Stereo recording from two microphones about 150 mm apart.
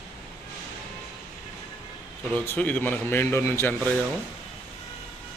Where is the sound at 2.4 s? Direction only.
10° left (ahead or behind).